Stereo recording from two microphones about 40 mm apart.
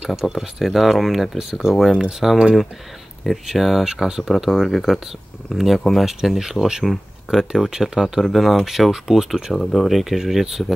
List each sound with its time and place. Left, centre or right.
0.0 s speech: centre
1.5 s speech: centre
3.3 s speech: centre
3.8 s speech: centre
8.3 s speech: centre
9.5 s speech: centre
9.8 s speech: centre